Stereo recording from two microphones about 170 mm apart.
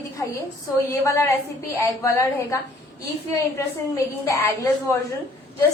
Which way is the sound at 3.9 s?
20° left (ahead or behind).